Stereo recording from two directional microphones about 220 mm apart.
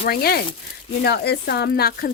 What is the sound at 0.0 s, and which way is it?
A woman's voice, 45° left (ahead or behind).